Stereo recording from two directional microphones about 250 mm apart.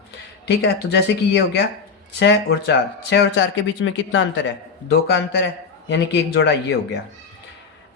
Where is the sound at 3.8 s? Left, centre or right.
Left.